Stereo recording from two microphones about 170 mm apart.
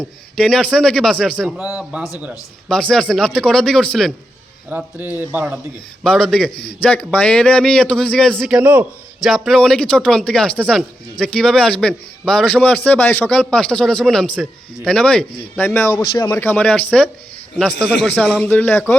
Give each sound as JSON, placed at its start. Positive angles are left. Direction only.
{"t": 0.0, "sound": "speech", "side_deg": 5}
{"t": 1.5, "sound": "a man's voice", "side_deg": -5}
{"t": 2.6, "sound": "speech", "side_deg": 5}
{"t": 4.7, "sound": "a man's voice", "side_deg": -10}
{"t": 6.0, "sound": "speech", "side_deg": 5}
{"t": 6.5, "sound": "a man's voice", "side_deg": 65}
{"t": 6.8, "sound": "speech", "side_deg": 5}